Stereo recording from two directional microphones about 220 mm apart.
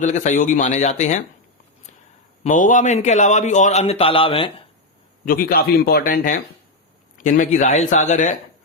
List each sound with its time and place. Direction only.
0.0 s a man's voice: 35° left (ahead or behind)
2.4 s a man's voice: 35° left (ahead or behind)
5.2 s a man's voice: 40° left (ahead or behind)